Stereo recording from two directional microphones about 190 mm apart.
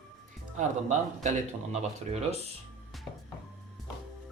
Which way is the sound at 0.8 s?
40° right (ahead or behind).